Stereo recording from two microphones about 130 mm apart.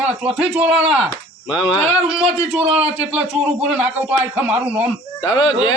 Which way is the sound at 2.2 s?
50° right (ahead or behind).